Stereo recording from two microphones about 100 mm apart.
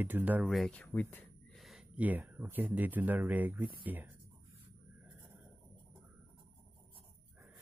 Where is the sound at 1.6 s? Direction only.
Centre (ahead or behind).